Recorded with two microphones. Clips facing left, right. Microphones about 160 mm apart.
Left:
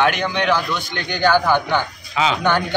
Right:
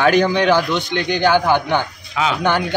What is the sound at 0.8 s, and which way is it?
A man's voice, 15° right (ahead or behind).